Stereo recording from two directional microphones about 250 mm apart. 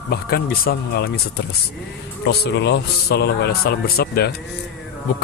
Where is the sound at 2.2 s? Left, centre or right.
Left.